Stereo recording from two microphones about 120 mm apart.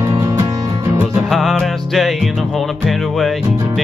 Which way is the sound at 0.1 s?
25° right (ahead or behind).